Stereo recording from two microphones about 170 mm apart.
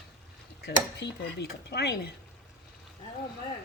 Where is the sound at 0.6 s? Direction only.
75° left (ahead or behind).